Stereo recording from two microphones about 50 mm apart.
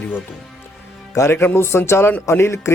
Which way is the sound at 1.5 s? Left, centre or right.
Left.